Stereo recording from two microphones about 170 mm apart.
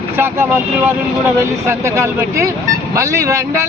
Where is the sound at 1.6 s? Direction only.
15° right (ahead or behind).